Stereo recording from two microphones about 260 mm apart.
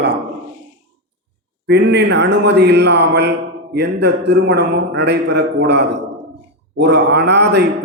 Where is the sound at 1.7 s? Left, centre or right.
Right.